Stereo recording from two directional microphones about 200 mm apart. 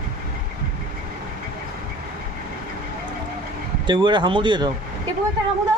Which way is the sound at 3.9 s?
20° right (ahead or behind).